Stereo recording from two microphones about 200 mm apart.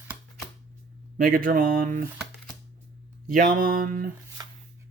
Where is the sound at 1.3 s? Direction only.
45° right (ahead or behind).